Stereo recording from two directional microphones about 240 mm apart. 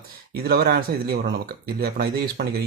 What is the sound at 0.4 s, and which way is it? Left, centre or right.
Speech, right.